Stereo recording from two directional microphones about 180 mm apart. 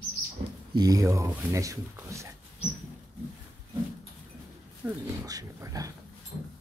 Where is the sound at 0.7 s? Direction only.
20° right (ahead or behind).